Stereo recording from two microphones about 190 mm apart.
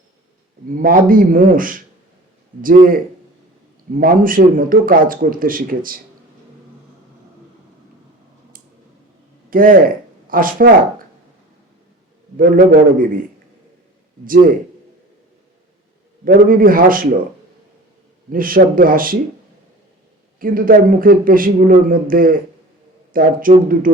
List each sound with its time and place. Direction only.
0.7 s a man's voice: 50° right (ahead or behind)
9.5 s speech: 45° right (ahead or behind)
12.4 s a man's voice: 45° right (ahead or behind)
14.3 s a man's voice: 45° right (ahead or behind)
16.2 s a man's voice: 50° right (ahead or behind)
18.3 s a man's voice: 50° right (ahead or behind)
20.4 s a man's voice: 50° right (ahead or behind)